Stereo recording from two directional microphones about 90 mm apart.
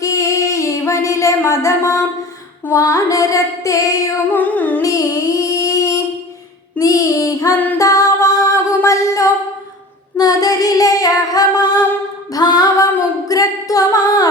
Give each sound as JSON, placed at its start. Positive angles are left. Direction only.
{"t": 0.0, "sound": "singing", "side_deg": 35}
{"t": 2.7, "sound": "female singing", "side_deg": 40}
{"t": 4.3, "sound": "music", "side_deg": 20}
{"t": 4.8, "sound": "music", "side_deg": 40}
{"t": 6.7, "sound": "female singing", "side_deg": 40}
{"t": 7.8, "sound": "music", "side_deg": 40}
{"t": 10.2, "sound": "female singing", "side_deg": 45}
{"t": 13.2, "sound": "singing", "side_deg": 40}